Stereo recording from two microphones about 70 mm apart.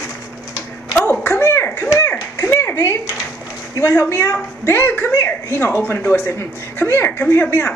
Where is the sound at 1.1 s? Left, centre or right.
Left.